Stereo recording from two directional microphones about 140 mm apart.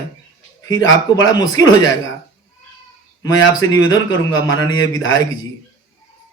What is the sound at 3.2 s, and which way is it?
A man's voice, 25° left (ahead or behind).